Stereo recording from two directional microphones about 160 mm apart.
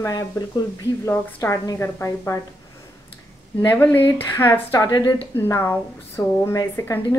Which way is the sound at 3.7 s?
15° left (ahead or behind).